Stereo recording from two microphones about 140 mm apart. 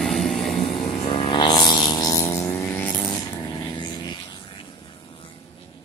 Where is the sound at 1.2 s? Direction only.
35° left (ahead or behind).